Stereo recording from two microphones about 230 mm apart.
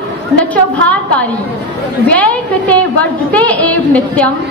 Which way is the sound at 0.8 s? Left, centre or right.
Right.